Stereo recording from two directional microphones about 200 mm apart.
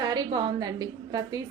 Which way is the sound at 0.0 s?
20° right (ahead or behind).